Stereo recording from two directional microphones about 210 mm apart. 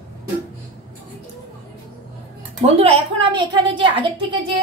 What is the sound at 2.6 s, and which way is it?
A woman's voice, 30° right (ahead or behind).